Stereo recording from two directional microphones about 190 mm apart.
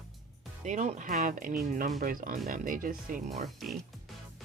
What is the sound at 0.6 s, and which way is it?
Speech, 40° right (ahead or behind).